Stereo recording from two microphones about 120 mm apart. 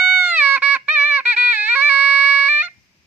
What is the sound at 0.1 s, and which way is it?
Music, 10° right (ahead or behind).